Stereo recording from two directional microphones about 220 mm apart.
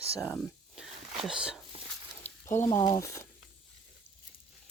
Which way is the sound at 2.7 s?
15° left (ahead or behind).